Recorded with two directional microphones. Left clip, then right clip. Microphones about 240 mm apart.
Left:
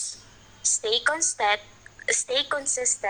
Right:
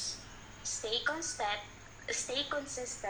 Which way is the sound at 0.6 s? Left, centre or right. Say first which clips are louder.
Left 11 dB; left.